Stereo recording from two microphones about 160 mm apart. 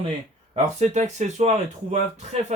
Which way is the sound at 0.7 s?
45° right (ahead or behind).